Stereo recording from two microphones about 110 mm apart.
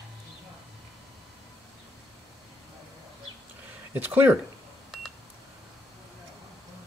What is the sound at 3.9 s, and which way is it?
Speech, 15° right (ahead or behind).